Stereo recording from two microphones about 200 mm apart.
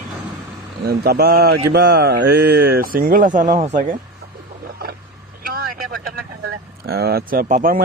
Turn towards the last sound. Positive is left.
turn(degrees=-45)  # may be behind; listen again after turning